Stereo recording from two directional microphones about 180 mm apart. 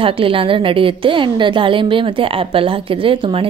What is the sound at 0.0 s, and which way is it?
A woman's voice, 30° right (ahead or behind).